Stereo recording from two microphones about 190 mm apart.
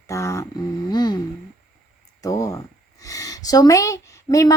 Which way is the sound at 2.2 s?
20° left (ahead or behind).